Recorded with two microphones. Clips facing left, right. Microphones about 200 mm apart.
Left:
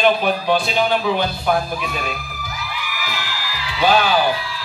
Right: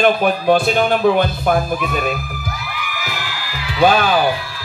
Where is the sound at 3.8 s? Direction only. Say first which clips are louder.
Right 3 dB; 50° right (ahead or behind).